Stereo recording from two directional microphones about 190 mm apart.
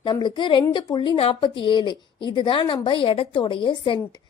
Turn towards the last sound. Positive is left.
turn(degrees=25)  # may be behind; listen again after turning